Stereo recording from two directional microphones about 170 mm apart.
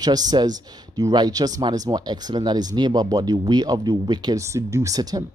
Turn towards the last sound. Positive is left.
turn(degrees=-20)  # may be behind; listen again after turning